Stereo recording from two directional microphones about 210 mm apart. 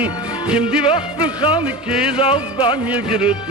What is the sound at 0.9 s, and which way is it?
Music, 25° left (ahead or behind).